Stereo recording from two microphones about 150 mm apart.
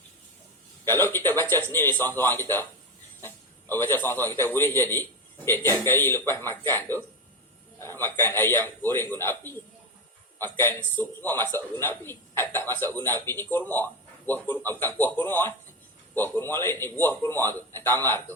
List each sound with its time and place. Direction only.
0.9 s a man's voice: 15° left (ahead or behind)